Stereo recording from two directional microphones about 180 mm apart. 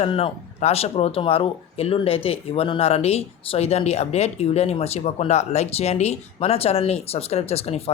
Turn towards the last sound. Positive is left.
turn(degrees=35)  # may be behind; listen again after turning